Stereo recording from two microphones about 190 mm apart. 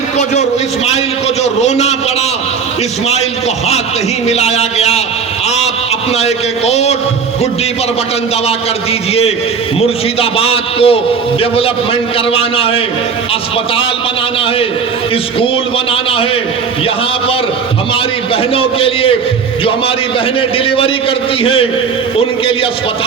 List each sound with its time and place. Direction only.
1.6 s a man's voice: 35° left (ahead or behind)
4.3 s a man's voice: 35° left (ahead or behind)
6.1 s a man's voice: 35° left (ahead or behind)
9.8 s a man's voice: 30° left (ahead or behind)
18.5 s a man's voice: 30° left (ahead or behind)
20.7 s a man's voice: 30° left (ahead or behind)